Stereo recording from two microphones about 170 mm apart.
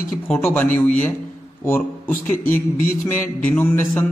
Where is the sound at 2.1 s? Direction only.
50° left (ahead or behind).